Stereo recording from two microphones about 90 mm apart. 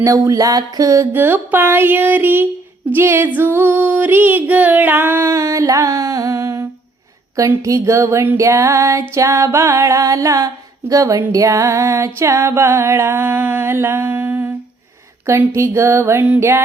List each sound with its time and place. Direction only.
0.0 s music: 40° right (ahead or behind)
1.1 s music: 25° right (ahead or behind)
5.3 s music: 35° right (ahead or behind)